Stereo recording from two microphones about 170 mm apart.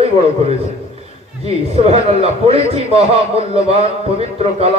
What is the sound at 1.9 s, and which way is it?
A man's voice, 35° right (ahead or behind).